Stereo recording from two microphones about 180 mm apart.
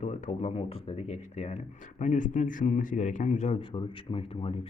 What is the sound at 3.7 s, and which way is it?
Speech, 30° left (ahead or behind).